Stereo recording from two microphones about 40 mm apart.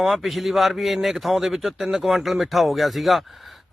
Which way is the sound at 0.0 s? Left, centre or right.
Centre.